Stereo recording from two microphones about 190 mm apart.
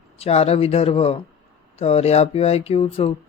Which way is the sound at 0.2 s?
35° left (ahead or behind).